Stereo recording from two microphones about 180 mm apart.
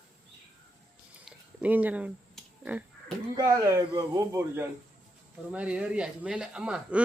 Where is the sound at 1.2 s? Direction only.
10° right (ahead or behind).